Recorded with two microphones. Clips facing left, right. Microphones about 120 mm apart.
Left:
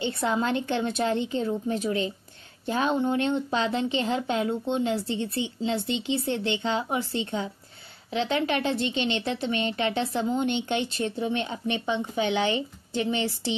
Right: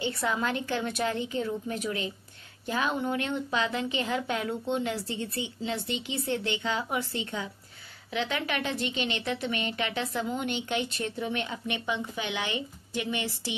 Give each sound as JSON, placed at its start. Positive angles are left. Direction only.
{"t": 0.0, "sound": "a woman's voice", "side_deg": 30}